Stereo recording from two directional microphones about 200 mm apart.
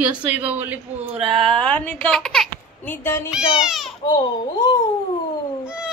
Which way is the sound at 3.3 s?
5° right (ahead or behind).